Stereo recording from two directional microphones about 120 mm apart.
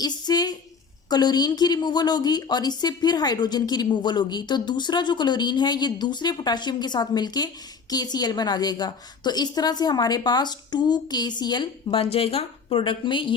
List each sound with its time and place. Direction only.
0.0 s a woman's voice: 35° left (ahead or behind)